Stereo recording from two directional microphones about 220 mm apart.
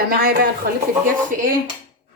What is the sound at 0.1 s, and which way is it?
Speech, 45° right (ahead or behind).